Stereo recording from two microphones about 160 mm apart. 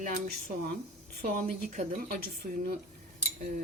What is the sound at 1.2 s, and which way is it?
Speech, 60° right (ahead or behind).